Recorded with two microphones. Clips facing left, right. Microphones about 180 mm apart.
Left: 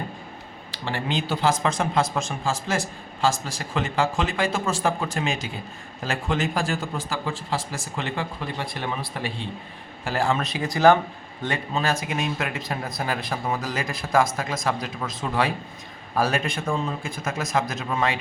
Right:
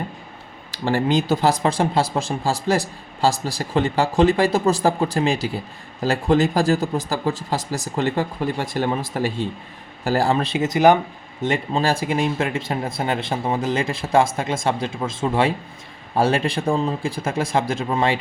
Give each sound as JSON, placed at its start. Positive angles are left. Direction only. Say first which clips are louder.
{"t": 0.7, "sound": "speech", "louder": "right 8 dB", "side_deg": -45}